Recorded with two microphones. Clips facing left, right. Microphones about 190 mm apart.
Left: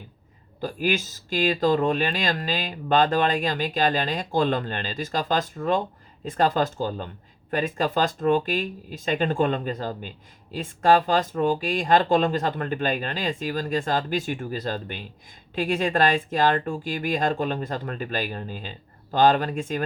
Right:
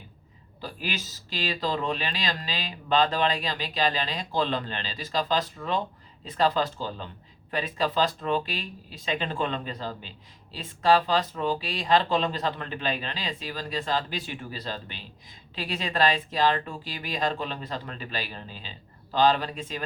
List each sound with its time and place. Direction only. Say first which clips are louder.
0.6 s speech: left 9 dB; 50° left (ahead or behind)